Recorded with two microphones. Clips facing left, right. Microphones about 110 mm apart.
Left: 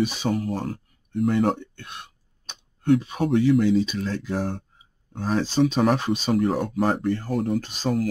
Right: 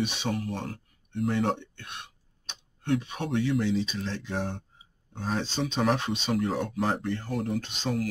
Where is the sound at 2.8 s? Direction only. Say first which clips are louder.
Left 8 dB; 45° left (ahead or behind).